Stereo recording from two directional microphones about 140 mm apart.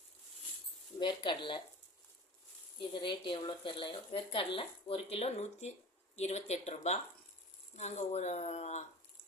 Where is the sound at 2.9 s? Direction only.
35° left (ahead or behind).